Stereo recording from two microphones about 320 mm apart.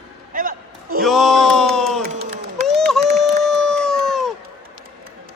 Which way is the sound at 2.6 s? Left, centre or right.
Centre.